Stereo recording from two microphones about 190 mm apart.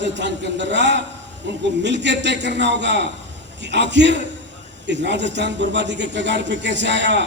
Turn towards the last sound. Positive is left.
turn(degrees=-65)  # may be behind; listen again after turning